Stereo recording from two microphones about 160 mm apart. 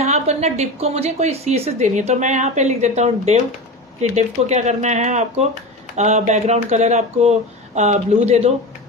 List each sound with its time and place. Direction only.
0.0 s a woman's voice: 40° right (ahead or behind)